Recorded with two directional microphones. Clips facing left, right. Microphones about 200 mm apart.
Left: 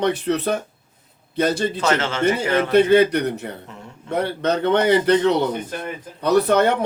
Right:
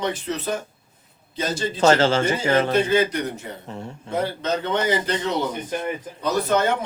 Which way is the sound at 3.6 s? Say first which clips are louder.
Right 5 dB; 30° right (ahead or behind).